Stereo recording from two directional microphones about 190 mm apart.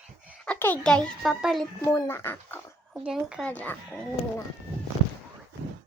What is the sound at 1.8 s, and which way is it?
Speech, 15° left (ahead or behind).